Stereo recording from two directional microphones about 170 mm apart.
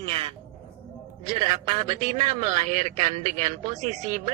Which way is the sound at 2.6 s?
45° right (ahead or behind).